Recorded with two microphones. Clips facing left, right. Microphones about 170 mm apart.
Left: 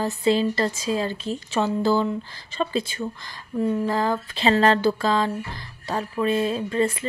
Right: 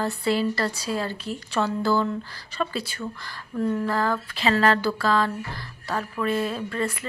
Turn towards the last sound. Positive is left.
turn(degrees=25)  # may be behind; listen again after turning